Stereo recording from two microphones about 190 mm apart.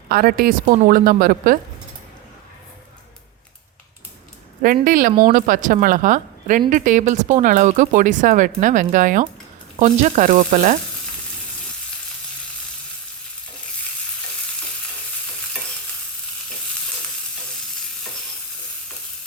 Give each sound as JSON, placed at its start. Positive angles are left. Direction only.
{"t": 0.1, "sound": "speech", "side_deg": -50}
{"t": 4.6, "sound": "speech", "side_deg": -50}